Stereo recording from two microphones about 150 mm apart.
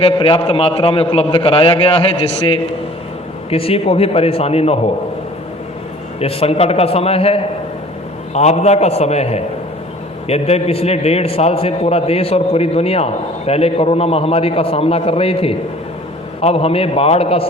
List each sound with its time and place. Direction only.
0.0 s a man's voice: 35° left (ahead or behind)
6.1 s a man's voice: 40° left (ahead or behind)